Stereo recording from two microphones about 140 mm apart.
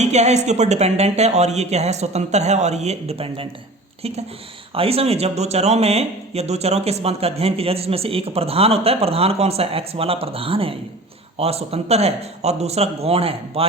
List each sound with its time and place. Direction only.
0.0 s speech: 55° right (ahead or behind)